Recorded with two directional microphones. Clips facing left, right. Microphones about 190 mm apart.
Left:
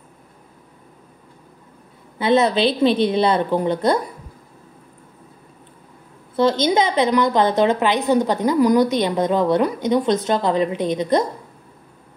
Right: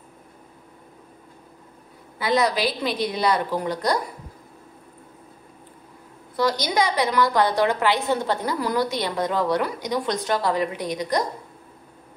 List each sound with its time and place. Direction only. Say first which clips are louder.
2.1 s a woman's voice: left 5 dB; 25° left (ahead or behind)
6.3 s a woman's voice: left 6 dB; 25° left (ahead or behind)